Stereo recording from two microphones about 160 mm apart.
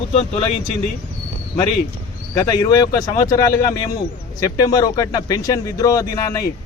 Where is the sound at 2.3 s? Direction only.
25° left (ahead or behind).